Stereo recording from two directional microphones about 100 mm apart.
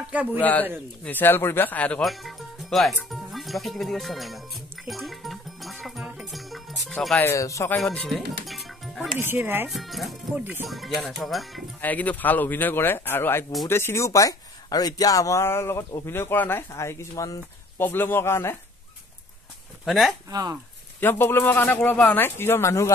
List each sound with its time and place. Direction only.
0.0 s speech: 15° right (ahead or behind)
0.4 s speech: 15° left (ahead or behind)
2.0 s music: centre (ahead or behind)
7.2 s speech: 30° left (ahead or behind)
7.7 s music: 5° left (ahead or behind)
9.2 s speech: 20° right (ahead or behind)
9.7 s speech: centre (ahead or behind)
10.3 s speech: 20° right (ahead or behind)
10.7 s speech: centre (ahead or behind)
11.8 s speech: 15° left (ahead or behind)
19.8 s speech: centre (ahead or behind)
20.2 s speech: 40° right (ahead or behind)
21.0 s speech: 20° left (ahead or behind)